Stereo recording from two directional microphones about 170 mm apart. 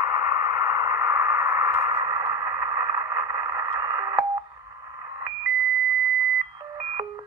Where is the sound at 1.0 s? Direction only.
10° right (ahead or behind).